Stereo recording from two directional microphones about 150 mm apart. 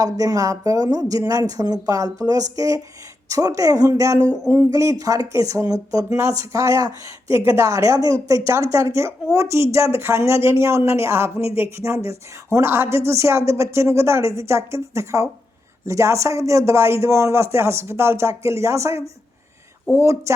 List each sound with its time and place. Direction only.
0.0 s speech: 25° right (ahead or behind)